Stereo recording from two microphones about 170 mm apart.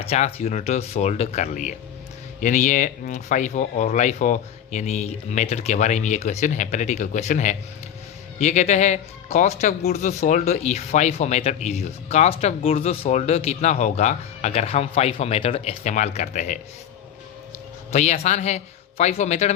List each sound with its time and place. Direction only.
0.0 s speech: 35° left (ahead or behind)
17.9 s speech: 40° left (ahead or behind)